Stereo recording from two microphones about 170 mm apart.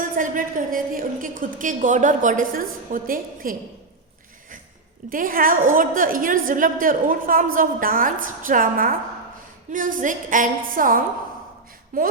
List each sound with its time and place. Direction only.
0.0 s a woman's voice: 55° right (ahead or behind)
5.0 s a woman's voice: 55° right (ahead or behind)